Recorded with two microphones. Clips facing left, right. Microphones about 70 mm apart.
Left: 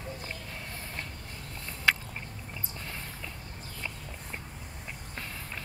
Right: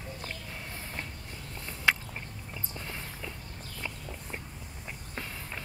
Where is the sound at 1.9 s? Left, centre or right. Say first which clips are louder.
Even; centre.